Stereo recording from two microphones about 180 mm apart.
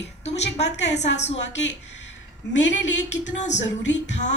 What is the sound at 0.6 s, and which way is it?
Speech, 75° left (ahead or behind).